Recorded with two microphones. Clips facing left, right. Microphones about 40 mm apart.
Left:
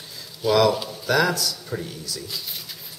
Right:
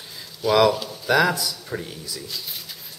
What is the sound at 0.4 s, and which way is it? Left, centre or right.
A man's voice, centre.